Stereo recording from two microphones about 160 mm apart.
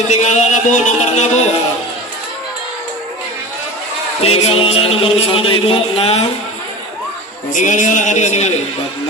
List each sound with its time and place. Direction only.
0.1 s speech: 45° left (ahead or behind)
4.2 s a man's voice: 35° left (ahead or behind)
7.5 s speech: 50° left (ahead or behind)